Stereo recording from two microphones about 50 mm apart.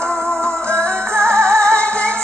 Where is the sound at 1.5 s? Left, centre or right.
Right.